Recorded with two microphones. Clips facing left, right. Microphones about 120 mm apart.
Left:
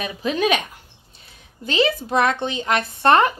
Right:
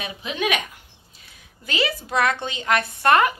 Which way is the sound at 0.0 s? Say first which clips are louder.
Left 5 dB; 40° left (ahead or behind).